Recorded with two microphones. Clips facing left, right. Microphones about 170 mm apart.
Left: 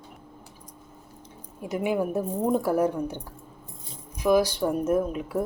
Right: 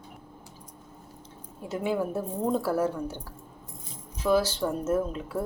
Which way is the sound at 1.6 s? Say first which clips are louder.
Left 2 dB; 15° left (ahead or behind).